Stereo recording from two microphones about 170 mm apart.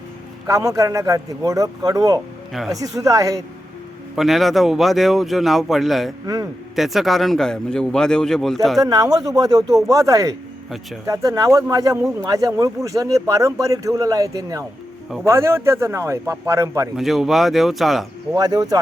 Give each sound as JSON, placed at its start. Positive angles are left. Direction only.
{"t": 0.4, "sound": "speech", "side_deg": -20}
{"t": 2.5, "sound": "speech", "side_deg": 0}
{"t": 2.7, "sound": "speech", "side_deg": -20}
{"t": 4.1, "sound": "speech", "side_deg": 0}
{"t": 6.2, "sound": "speech", "side_deg": -20}
{"t": 6.7, "sound": "speech", "side_deg": 0}
{"t": 8.8, "sound": "speech", "side_deg": -20}
{"t": 17.0, "sound": "speech", "side_deg": 0}
{"t": 18.3, "sound": "speech", "side_deg": -25}